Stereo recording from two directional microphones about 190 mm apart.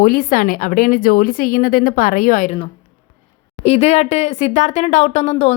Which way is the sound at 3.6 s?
35° left (ahead or behind).